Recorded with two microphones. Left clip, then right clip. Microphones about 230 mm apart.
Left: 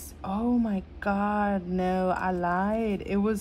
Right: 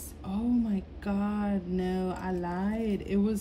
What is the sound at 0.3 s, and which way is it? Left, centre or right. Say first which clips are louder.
Mantra: left 3 dB; centre.